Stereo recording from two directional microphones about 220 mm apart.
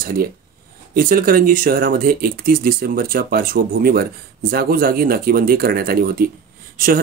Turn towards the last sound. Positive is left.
turn(degrees=-40)  # may be behind; listen again after turning